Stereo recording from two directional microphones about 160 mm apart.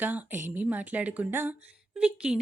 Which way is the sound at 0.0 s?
10° right (ahead or behind).